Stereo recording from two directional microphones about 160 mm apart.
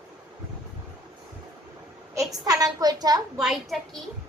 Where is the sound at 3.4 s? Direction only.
Centre (ahead or behind).